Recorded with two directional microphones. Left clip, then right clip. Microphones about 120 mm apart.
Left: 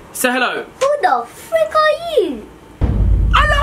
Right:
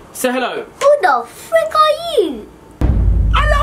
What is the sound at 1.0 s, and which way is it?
A child's voice, 20° right (ahead or behind).